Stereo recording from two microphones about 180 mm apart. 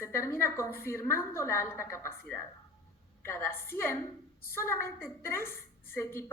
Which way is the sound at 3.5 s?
55° left (ahead or behind).